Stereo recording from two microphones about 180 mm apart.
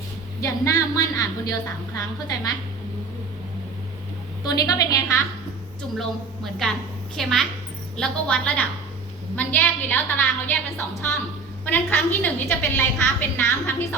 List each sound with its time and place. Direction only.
0.4 s a woman's voice: 20° left (ahead or behind)
4.4 s a woman's voice: 20° left (ahead or behind)
6.0 s a woman's voice: centre (ahead or behind)